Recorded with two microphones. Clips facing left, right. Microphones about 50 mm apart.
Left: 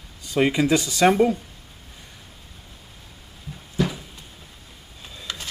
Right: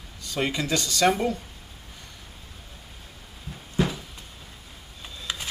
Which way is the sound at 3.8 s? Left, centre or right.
Right.